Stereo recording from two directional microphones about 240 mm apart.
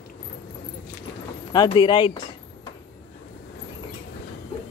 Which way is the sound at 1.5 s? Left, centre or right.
Centre.